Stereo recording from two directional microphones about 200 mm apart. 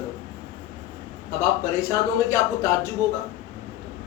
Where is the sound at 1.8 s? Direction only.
15° left (ahead or behind).